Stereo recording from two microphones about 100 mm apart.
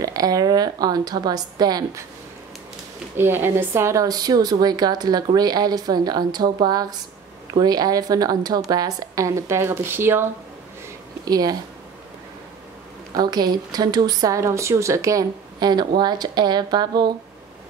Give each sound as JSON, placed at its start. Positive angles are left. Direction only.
{"t": 0.0, "sound": "speech", "side_deg": -40}
{"t": 3.2, "sound": "speech", "side_deg": -25}
{"t": 11.2, "sound": "speech", "side_deg": -40}
{"t": 13.1, "sound": "a woman's voice", "side_deg": -45}